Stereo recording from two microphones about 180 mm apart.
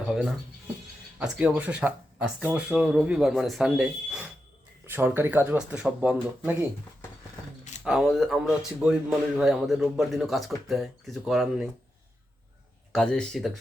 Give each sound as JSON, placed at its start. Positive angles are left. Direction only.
{"t": 0.1, "sound": "a man's voice", "side_deg": 0}
{"t": 7.9, "sound": "a man's voice", "side_deg": 0}
{"t": 12.9, "sound": "a man's voice", "side_deg": 5}